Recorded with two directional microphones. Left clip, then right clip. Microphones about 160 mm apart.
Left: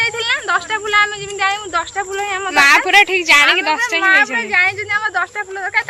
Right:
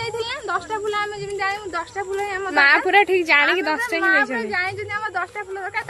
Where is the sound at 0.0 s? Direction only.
10° left (ahead or behind).